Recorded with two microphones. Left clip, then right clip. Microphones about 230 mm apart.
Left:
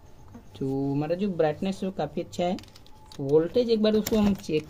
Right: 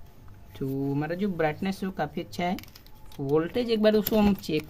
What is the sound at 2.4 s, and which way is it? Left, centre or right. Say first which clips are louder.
Speech: right 1 dB; right.